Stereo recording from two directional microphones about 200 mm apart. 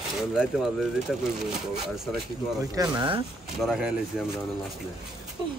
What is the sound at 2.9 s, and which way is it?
Speech, 25° right (ahead or behind).